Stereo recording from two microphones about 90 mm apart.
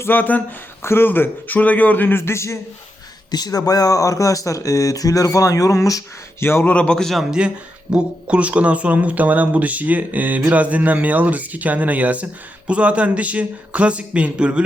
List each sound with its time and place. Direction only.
0.0 s speech: 20° left (ahead or behind)
3.3 s speech: 45° left (ahead or behind)
6.4 s speech: 25° left (ahead or behind)
6.7 s a man's voice: 10° left (ahead or behind); by 14.6 s 10° right (ahead or behind)